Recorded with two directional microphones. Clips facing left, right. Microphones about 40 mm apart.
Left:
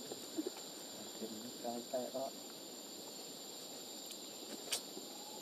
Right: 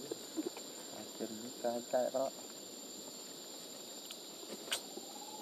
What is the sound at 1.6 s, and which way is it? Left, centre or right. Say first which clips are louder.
Speech: right 7 dB; right.